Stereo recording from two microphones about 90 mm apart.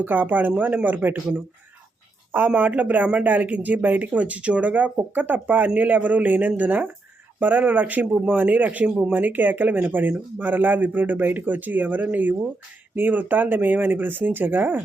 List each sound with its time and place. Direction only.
0.0 s speech: 20° right (ahead or behind)